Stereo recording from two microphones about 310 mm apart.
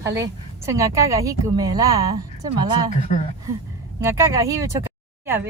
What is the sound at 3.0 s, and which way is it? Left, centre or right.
Speech, left.